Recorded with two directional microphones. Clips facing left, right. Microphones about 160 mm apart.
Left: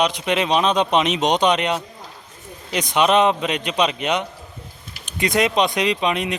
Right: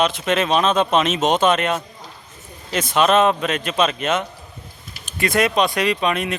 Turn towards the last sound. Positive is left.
turn(degrees=20)  # may be behind; listen again after turning